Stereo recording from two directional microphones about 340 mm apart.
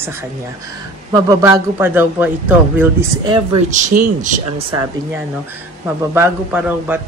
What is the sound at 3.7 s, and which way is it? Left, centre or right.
Speech, right.